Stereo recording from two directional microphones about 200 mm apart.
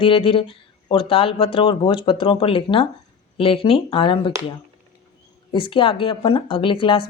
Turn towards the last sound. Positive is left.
turn(degrees=25)  # may be behind; listen again after turning